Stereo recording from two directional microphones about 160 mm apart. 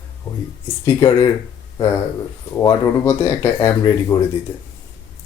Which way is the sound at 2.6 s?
20° left (ahead or behind).